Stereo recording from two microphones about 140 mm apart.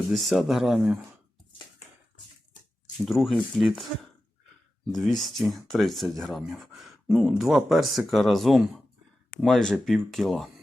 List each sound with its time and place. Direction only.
0.1 s speech: centre (ahead or behind)
3.0 s speech: centre (ahead or behind)
4.9 s speech: centre (ahead or behind)